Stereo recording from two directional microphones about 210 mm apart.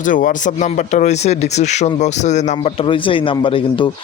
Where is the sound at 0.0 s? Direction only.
40° left (ahead or behind).